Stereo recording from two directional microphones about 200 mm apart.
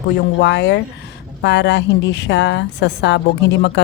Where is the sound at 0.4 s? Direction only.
60° left (ahead or behind).